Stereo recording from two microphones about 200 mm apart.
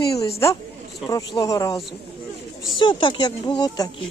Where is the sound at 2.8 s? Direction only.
25° left (ahead or behind).